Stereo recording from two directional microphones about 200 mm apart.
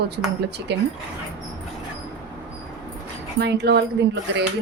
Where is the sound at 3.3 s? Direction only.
55° right (ahead or behind).